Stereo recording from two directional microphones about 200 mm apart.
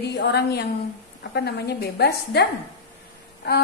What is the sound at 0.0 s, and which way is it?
A woman's voice, 55° left (ahead or behind).